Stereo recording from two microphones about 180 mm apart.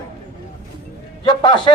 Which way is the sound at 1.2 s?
25° left (ahead or behind).